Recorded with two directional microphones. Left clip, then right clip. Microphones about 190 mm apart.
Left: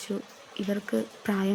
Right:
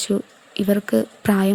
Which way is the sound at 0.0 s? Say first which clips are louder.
Right 11 dB; 30° right (ahead or behind).